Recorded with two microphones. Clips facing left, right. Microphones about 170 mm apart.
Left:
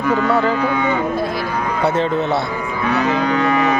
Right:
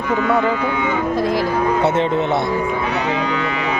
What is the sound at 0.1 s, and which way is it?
Speech, 40° left (ahead or behind).